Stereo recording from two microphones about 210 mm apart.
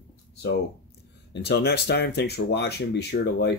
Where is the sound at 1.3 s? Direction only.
50° left (ahead or behind).